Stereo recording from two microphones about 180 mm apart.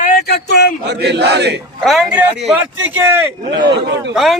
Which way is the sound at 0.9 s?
70° right (ahead or behind).